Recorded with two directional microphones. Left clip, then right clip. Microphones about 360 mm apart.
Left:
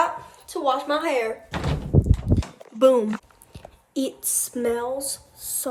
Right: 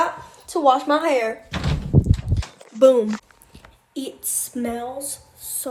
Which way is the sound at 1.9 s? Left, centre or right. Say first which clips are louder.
Right 1 dB; centre.